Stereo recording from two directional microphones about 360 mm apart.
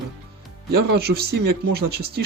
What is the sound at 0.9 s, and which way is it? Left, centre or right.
Speech, right.